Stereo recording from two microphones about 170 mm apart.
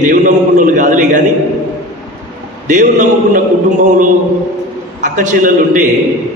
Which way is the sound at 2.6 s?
45° right (ahead or behind).